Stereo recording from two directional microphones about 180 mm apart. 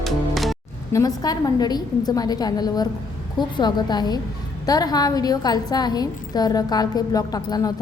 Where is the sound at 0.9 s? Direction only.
20° left (ahead or behind).